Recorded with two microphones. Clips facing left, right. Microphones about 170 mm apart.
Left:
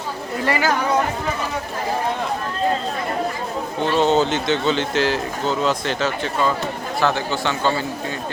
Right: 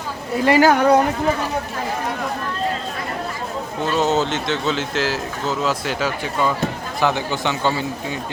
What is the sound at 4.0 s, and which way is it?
Speech, 5° right (ahead or behind).